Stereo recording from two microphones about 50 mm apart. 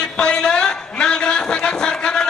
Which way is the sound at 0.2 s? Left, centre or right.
Centre.